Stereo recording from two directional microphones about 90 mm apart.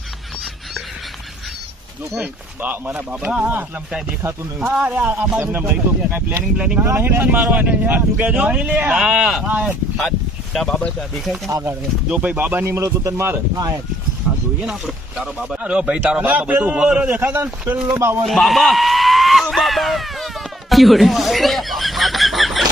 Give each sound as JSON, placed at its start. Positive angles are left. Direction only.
{"t": 2.6, "sound": "speech", "side_deg": -20}
{"t": 6.6, "sound": "speech", "side_deg": -10}
{"t": 6.8, "sound": "speech", "side_deg": -25}
{"t": 9.5, "sound": "speech", "side_deg": -20}
{"t": 10.5, "sound": "speech", "side_deg": 5}
{"t": 12.1, "sound": "speech", "side_deg": -15}
{"t": 14.6, "sound": "speech", "side_deg": -5}
{"t": 17.2, "sound": "speech", "side_deg": -20}
{"t": 18.3, "sound": "a sound", "side_deg": 0}
{"t": 20.7, "sound": "snicker", "side_deg": 0}